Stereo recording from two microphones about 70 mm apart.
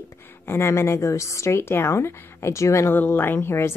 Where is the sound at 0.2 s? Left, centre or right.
Left.